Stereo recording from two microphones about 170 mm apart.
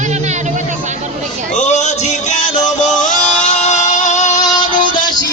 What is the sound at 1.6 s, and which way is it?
Music, 45° left (ahead or behind).